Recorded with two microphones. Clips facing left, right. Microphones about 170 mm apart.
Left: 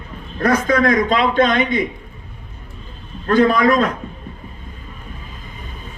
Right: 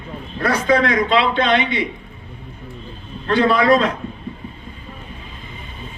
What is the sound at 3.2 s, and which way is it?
Speech, 45° left (ahead or behind).